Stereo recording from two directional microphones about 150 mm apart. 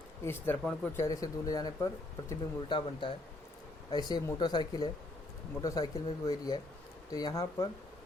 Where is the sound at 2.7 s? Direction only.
35° left (ahead or behind).